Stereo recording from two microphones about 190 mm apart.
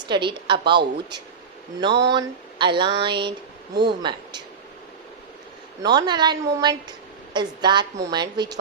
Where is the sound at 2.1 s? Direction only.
25° right (ahead or behind).